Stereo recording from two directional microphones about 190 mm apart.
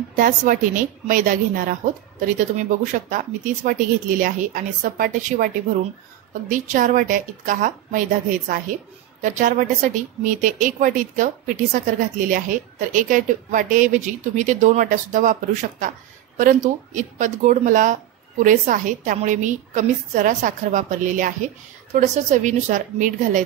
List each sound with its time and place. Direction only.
0.1 s a woman's voice: 45° right (ahead or behind)
6.5 s a woman's voice: 45° right (ahead or behind)
16.3 s a woman's voice: 40° right (ahead or behind)